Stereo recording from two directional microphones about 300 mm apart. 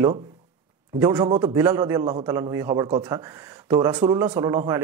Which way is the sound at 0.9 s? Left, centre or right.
Centre.